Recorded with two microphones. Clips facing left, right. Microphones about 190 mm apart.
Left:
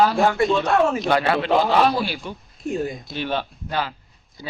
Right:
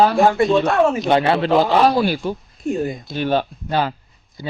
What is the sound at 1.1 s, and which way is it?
Speech, 30° right (ahead or behind).